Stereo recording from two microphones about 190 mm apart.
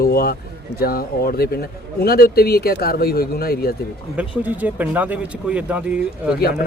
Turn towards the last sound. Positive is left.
turn(degrees=-5)  # may be behind; listen again after turning